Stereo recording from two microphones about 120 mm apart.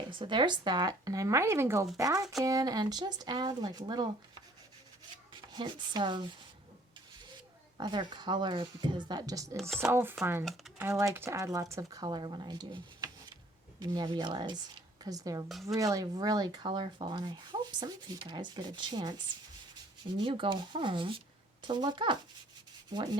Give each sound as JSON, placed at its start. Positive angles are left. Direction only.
{"t": 0.1, "sound": "speech", "side_deg": -40}
{"t": 5.5, "sound": "speech", "side_deg": -40}
{"t": 7.8, "sound": "speech", "side_deg": -35}
{"t": 9.6, "sound": "speech", "side_deg": 0}
{"t": 9.9, "sound": "speech", "side_deg": -20}
{"t": 20.1, "sound": "speech", "side_deg": -45}